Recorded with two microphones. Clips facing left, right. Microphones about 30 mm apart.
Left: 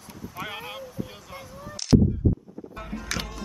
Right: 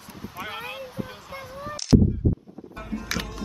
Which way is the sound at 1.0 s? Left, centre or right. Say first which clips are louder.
Even; right.